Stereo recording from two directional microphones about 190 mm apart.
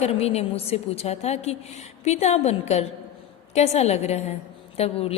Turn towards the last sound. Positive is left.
turn(degrees=30)  # may be behind; listen again after turning